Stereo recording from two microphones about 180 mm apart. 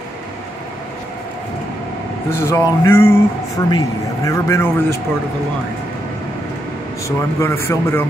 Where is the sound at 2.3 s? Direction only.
15° left (ahead or behind).